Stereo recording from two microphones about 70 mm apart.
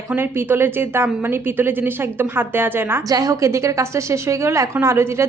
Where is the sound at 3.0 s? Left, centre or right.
Right.